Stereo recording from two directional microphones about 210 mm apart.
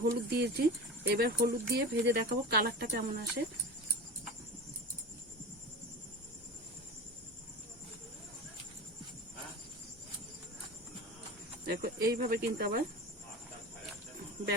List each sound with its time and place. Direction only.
0.0 s speech: 50° right (ahead or behind)
11.6 s speech: 50° right (ahead or behind)